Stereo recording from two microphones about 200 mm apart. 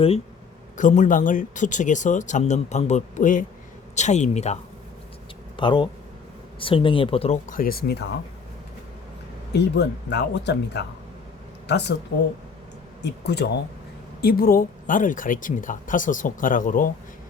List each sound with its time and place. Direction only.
0.8 s speech: 40° left (ahead or behind)
5.5 s speech: 25° left (ahead or behind); by 7.9 s 45° left (ahead or behind)
9.5 s speech: 60° left (ahead or behind)
13.0 s speech: 55° left (ahead or behind)